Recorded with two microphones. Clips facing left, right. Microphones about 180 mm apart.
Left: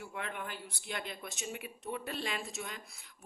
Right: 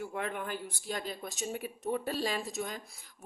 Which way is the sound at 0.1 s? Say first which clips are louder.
Right 5 dB; 45° right (ahead or behind).